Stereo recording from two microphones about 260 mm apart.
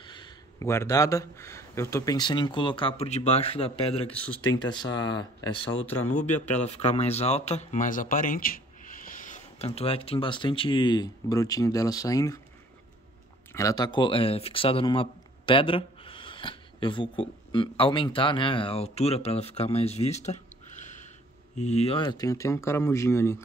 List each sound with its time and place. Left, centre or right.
0.0 s a man's voice: centre
6.5 s speech: left
13.5 s speech: centre